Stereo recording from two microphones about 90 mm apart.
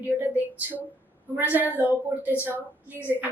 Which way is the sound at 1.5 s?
20° right (ahead or behind).